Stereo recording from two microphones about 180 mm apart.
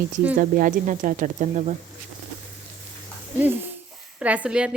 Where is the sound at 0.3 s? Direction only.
50° right (ahead or behind).